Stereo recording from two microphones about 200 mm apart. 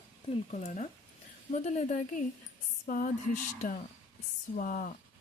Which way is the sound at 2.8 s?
45° left (ahead or behind).